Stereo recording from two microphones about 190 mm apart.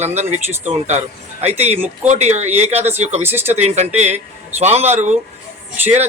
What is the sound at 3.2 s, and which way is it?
Speech, 10° right (ahead or behind).